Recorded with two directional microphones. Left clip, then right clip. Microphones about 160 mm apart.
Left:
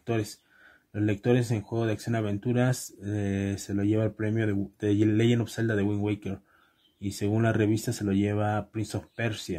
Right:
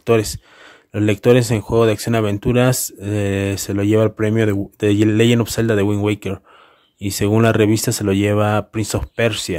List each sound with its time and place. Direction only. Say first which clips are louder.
0.0 s speech: right 15 dB; 45° right (ahead or behind)